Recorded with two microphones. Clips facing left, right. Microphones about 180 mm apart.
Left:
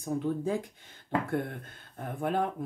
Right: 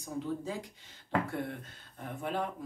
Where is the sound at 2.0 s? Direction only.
50° left (ahead or behind).